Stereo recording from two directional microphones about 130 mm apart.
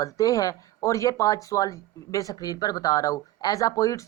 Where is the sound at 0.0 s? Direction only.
25° left (ahead or behind).